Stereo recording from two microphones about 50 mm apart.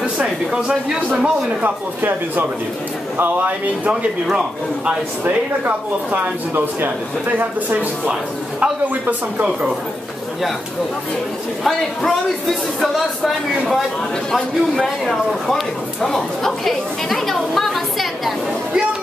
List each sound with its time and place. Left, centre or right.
0.5 s a man's voice: centre
1.6 s speech: right
3.9 s a man's voice: centre
5.7 s speech: right
11.6 s speech: centre
15.0 s speech: centre
16.6 s a sound: centre